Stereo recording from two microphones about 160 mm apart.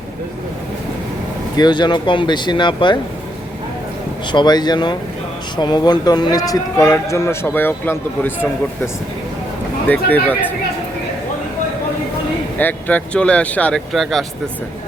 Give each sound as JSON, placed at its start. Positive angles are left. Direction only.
{"t": 1.5, "sound": "speech", "side_deg": 25}
{"t": 4.3, "sound": "a man's voice", "side_deg": 25}
{"t": 9.9, "sound": "a man's voice", "side_deg": 10}
{"t": 12.5, "sound": "a man's voice", "side_deg": 10}